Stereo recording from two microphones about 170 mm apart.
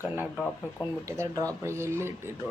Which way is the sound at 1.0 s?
20° right (ahead or behind).